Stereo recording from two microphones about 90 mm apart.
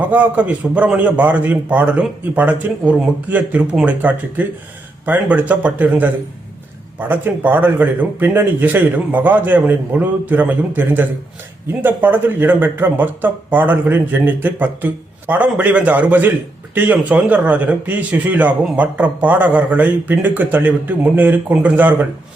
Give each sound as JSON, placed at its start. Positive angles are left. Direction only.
{"t": 0.0, "sound": "a man's voice", "side_deg": -15}
{"t": 7.1, "sound": "a man's voice", "side_deg": -20}